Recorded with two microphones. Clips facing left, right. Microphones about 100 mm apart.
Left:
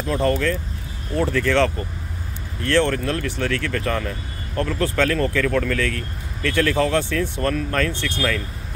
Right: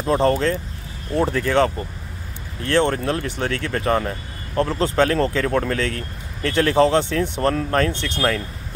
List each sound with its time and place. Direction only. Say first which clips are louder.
0.0 s speech: right 3 dB; 35° right (ahead or behind)